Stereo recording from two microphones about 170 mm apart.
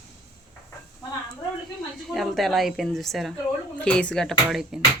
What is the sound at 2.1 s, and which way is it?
Speech, centre (ahead or behind).